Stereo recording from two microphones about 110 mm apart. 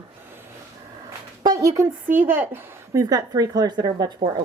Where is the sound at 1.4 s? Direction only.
35° right (ahead or behind).